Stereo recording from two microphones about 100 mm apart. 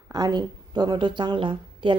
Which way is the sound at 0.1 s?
45° right (ahead or behind).